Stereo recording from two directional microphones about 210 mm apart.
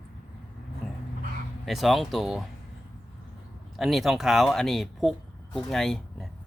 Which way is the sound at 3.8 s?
Centre (ahead or behind).